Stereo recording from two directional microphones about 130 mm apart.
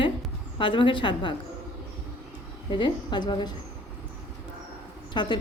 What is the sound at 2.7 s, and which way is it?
Speech, 35° left (ahead or behind).